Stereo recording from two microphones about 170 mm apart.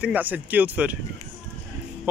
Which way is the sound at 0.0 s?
10° right (ahead or behind).